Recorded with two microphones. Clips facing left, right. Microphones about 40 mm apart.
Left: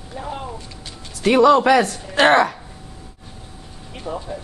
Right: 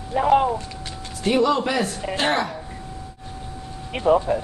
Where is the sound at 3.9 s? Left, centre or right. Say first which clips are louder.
Right 11 dB; right.